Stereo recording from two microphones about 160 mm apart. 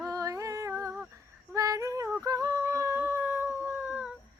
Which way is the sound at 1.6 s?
20° right (ahead or behind).